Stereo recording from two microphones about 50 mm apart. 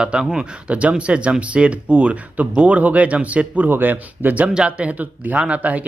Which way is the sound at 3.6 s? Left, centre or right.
Right.